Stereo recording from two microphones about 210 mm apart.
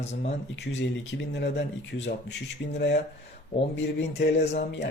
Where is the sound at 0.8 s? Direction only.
55° left (ahead or behind).